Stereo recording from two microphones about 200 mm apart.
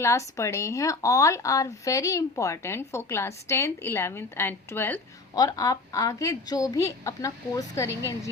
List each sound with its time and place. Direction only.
0.0 s speech: 15° left (ahead or behind)